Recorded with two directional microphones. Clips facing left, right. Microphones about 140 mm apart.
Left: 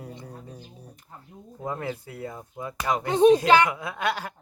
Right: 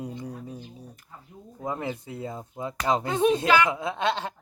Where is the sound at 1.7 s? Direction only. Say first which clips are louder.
Right 1 dB; 20° right (ahead or behind).